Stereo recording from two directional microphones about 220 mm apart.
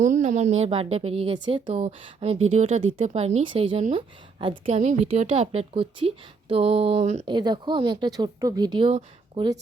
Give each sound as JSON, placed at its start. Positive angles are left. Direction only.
{"t": 0.0, "sound": "a woman's voice", "side_deg": -35}
{"t": 7.3, "sound": "speech", "side_deg": -20}